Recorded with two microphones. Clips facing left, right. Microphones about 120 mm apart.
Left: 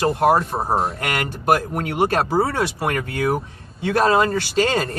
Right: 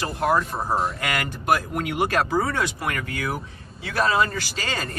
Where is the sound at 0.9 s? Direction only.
45° left (ahead or behind).